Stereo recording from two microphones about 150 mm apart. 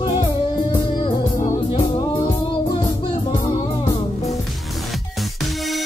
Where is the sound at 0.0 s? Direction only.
30° left (ahead or behind).